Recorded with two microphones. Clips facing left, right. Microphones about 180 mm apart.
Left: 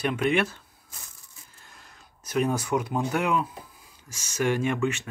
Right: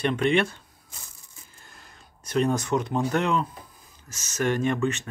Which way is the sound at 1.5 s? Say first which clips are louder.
Right 1 dB; centre (ahead or behind).